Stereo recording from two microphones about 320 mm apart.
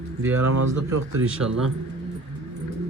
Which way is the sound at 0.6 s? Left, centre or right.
Right.